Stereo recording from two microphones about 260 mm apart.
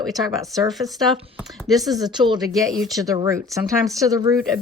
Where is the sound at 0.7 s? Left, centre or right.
Centre.